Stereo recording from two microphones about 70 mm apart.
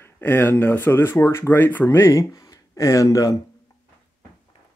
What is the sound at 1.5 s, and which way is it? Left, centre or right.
Speech, left.